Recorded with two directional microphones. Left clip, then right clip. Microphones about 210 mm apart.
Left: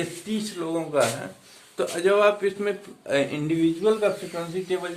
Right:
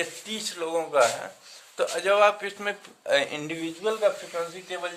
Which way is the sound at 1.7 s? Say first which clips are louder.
Left 1 dB; 20° right (ahead or behind).